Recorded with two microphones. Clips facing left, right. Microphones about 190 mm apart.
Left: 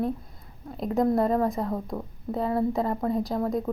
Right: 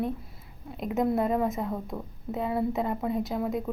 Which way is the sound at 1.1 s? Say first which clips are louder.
Left 3 dB; 5° right (ahead or behind).